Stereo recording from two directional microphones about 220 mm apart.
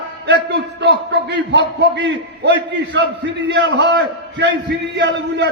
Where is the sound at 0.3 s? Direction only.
50° right (ahead or behind).